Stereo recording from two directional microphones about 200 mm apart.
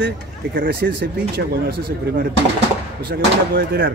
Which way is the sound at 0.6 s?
55° right (ahead or behind).